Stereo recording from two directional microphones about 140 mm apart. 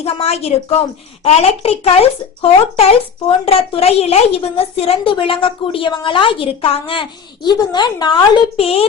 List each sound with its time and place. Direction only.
0.0 s a woman's voice: 50° left (ahead or behind)